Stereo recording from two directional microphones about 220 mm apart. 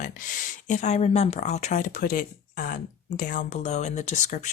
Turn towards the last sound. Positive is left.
turn(degrees=35)  # may be behind; listen again after turning